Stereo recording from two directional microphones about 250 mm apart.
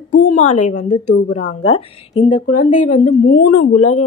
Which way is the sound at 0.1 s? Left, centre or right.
Left.